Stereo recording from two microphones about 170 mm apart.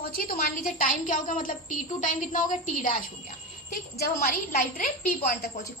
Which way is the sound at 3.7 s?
65° left (ahead or behind).